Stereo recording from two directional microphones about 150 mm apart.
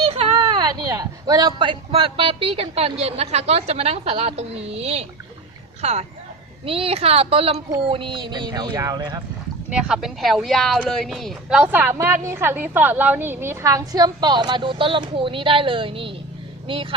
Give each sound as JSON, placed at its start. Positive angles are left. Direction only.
{"t": 0.0, "sound": "speech", "side_deg": -40}
{"t": 9.6, "sound": "speech", "side_deg": -5}